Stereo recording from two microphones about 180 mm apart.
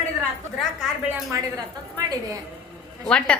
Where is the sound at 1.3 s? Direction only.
20° right (ahead or behind).